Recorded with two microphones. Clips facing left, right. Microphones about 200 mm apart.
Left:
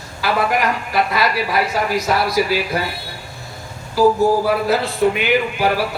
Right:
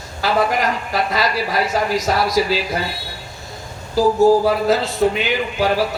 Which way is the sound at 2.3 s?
55° left (ahead or behind).